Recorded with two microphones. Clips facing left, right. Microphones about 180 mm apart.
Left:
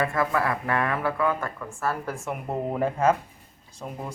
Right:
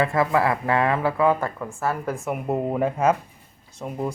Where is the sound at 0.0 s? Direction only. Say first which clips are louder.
Right 4 dB; 25° right (ahead or behind).